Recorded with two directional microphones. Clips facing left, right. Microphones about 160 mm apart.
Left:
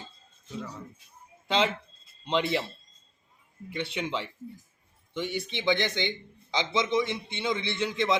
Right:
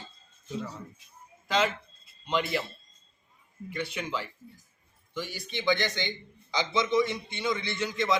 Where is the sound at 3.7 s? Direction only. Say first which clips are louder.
Left 2 dB; 25° left (ahead or behind).